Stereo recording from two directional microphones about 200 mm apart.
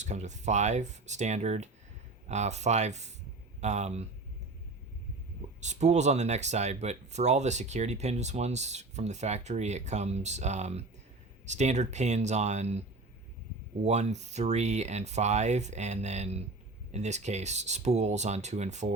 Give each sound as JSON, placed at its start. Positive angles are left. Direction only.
{"t": 0.0, "sound": "speech", "side_deg": -35}
{"t": 5.5, "sound": "speech", "side_deg": -35}
{"t": 13.8, "sound": "speech", "side_deg": -35}